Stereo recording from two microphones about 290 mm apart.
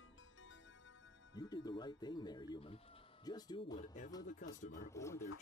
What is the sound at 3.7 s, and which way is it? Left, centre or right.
Speech, left.